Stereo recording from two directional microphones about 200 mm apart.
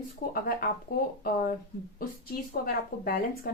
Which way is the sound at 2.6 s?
50° left (ahead or behind).